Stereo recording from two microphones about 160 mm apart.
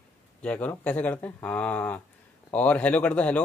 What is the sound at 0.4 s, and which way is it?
Speech, 10° left (ahead or behind).